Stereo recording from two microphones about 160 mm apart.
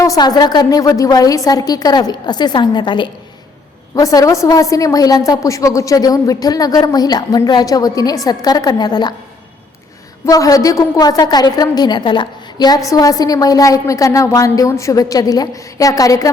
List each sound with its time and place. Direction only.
0.0 s a woman's voice: 25° left (ahead or behind)
10.2 s a woman's voice: 20° left (ahead or behind)